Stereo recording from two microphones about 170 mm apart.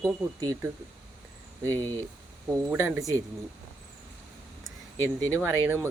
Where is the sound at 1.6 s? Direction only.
10° left (ahead or behind).